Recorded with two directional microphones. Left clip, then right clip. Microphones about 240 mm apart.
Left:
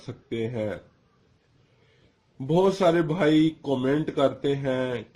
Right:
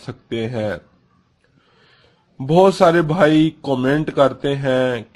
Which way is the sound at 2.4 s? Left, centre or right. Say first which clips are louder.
Right 9 dB; right.